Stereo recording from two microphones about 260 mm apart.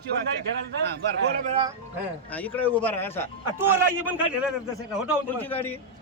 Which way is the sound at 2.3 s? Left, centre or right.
Centre.